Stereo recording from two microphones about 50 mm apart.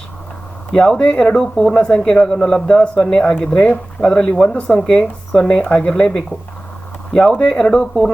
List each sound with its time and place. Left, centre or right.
0.7 s speech: centre
1.4 s speech: centre